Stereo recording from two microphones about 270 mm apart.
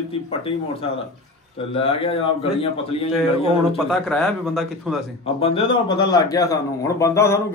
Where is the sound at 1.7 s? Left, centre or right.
Left.